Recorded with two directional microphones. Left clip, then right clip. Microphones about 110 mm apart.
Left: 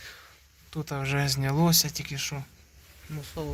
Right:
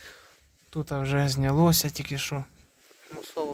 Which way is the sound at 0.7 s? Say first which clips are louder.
Right 2 dB; 55° right (ahead or behind).